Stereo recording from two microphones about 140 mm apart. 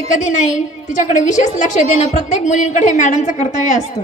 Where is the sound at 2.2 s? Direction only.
60° left (ahead or behind).